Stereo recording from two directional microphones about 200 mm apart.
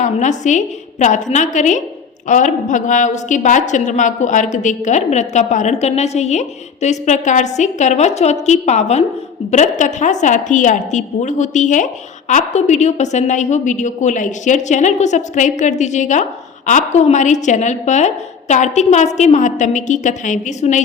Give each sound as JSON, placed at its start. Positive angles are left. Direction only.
{"t": 0.0, "sound": "a woman's voice", "side_deg": 35}